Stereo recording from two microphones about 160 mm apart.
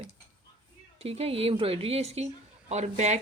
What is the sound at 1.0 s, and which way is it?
A woman's voice, 40° right (ahead or behind).